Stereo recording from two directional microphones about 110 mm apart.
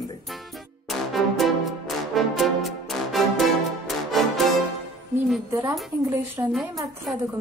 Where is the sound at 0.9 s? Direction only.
Centre (ahead or behind).